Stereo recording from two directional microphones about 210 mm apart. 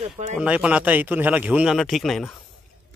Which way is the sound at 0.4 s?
5° right (ahead or behind).